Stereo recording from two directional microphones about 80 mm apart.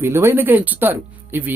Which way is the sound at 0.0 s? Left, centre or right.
Right.